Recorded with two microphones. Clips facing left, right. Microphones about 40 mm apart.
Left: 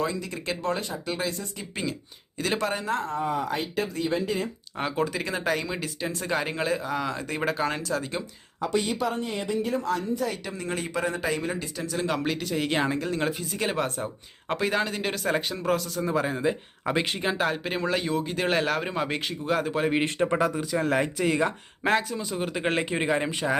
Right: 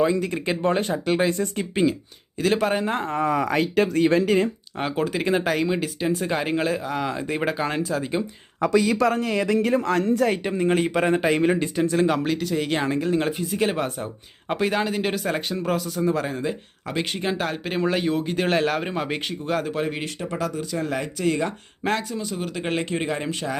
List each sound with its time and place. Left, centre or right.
0.4 s speech: right
0.9 s a man's voice: right
2.4 s speech: centre
2.7 s a man's voice: right
3.2 s speech: right
4.8 s speech: centre
8.6 s speech: right
10.4 s a man's voice: right
11.9 s speech: centre
12.2 s speech: centre
20.1 s speech: left
20.7 s speech: centre